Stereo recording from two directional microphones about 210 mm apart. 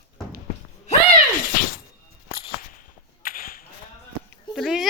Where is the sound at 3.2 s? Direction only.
40° left (ahead or behind).